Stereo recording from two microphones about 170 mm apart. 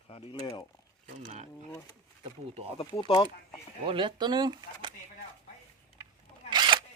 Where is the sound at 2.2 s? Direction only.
35° right (ahead or behind).